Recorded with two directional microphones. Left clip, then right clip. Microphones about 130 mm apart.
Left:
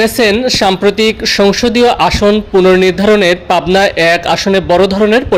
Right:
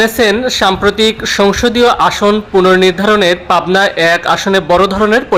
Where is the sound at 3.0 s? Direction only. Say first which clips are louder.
Left 1 dB; 40° left (ahead or behind).